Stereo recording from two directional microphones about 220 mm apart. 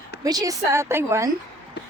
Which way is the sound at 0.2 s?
15° right (ahead or behind).